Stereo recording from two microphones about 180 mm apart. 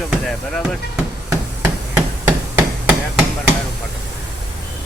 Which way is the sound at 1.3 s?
15° right (ahead or behind).